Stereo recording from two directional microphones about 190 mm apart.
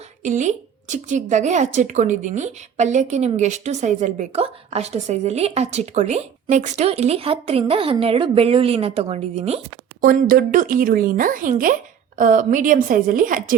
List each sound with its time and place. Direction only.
0.2 s a woman's voice: 40° right (ahead or behind)
10.0 s speech: 50° right (ahead or behind)